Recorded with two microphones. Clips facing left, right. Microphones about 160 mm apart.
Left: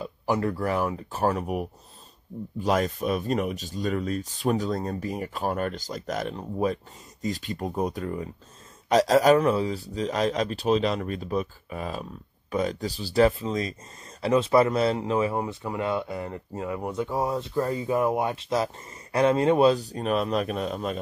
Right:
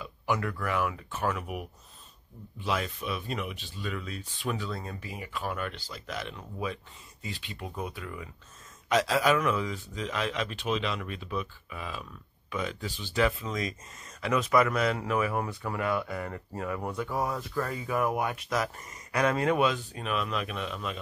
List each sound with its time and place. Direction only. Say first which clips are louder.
0.0 s speech: left 5 dB; 35° left (ahead or behind)